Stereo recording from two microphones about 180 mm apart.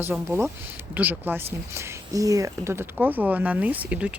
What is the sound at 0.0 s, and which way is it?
Speech, 10° right (ahead or behind).